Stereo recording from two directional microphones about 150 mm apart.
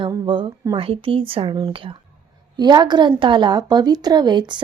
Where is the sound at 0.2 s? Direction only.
35° right (ahead or behind).